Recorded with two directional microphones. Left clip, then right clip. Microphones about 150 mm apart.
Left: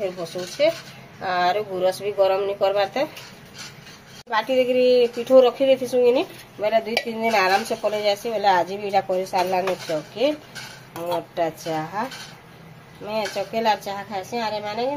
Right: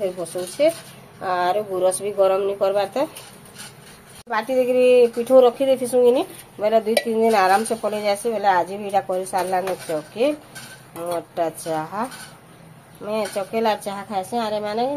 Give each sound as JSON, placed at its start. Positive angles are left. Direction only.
{"t": 0.0, "sound": "speech", "side_deg": -20}
{"t": 4.3, "sound": "speech", "side_deg": -15}